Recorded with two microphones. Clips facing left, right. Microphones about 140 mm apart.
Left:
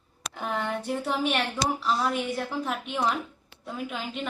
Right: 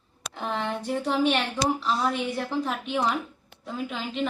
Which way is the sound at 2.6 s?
Centre (ahead or behind).